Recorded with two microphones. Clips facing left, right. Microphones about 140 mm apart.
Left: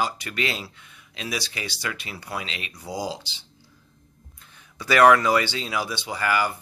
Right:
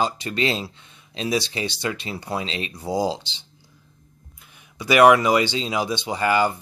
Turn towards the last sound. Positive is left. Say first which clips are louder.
# right 4 dB
turn(degrees=-25)  # may be behind; listen again after turning